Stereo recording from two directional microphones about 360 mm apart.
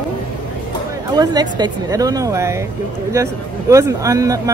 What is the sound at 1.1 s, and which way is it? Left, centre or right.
Speech, centre.